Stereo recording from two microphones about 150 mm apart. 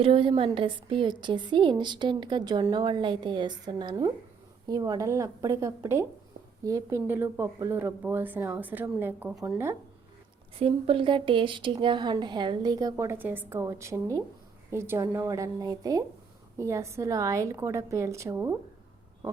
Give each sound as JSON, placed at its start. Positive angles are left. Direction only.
{"t": 0.0, "sound": "a woman's voice", "side_deg": -35}
{"t": 10.6, "sound": "a woman's voice", "side_deg": -35}